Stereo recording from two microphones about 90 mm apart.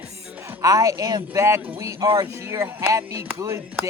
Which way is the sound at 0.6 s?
40° right (ahead or behind).